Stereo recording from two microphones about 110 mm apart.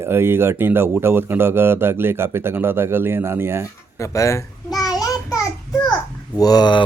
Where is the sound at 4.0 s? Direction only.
25° left (ahead or behind).